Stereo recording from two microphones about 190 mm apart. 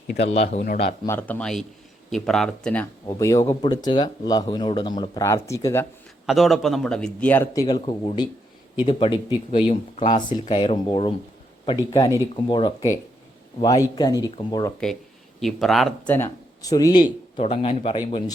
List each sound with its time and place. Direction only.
0.1 s speech: 65° left (ahead or behind)
0.3 s a man's voice: 40° left (ahead or behind)
1.0 s speech: 10° left (ahead or behind)
3.1 s speech: 15° left (ahead or behind)
6.2 s speech: centre (ahead or behind); by 11.1 s 25° left (ahead or behind)
11.9 s speech: 15° left (ahead or behind)
15.4 s speech: centre (ahead or behind)
16.1 s speech: 15° left (ahead or behind)
17.3 s speech: 35° left (ahead or behind)